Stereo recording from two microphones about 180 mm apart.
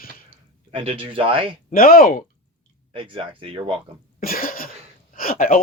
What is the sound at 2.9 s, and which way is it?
Speech, 30° right (ahead or behind).